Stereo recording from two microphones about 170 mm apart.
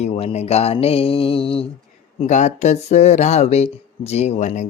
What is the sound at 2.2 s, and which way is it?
Speech, 45° left (ahead or behind).